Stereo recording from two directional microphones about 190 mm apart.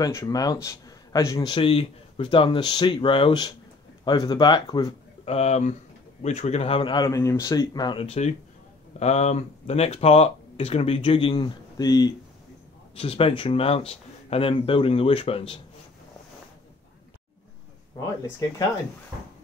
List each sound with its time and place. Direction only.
0.0 s a man's voice: 20° left (ahead or behind)
12.9 s a man's voice: 30° left (ahead or behind)